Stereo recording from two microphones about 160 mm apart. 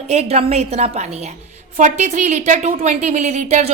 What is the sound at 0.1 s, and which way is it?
A woman's voice, 40° right (ahead or behind).